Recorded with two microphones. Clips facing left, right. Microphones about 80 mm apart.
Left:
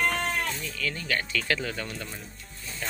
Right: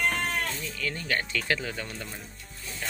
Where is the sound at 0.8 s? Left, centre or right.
Right; by 2.3 s centre.